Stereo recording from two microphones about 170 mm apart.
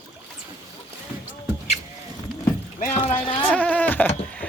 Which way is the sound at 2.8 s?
45° left (ahead or behind).